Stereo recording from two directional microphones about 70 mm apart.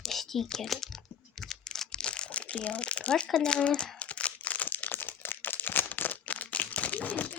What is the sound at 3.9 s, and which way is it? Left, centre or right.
Crumpling, centre.